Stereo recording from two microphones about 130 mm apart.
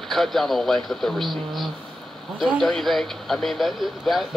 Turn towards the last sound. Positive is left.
turn(degrees=0)  # may be behind; listen again after turning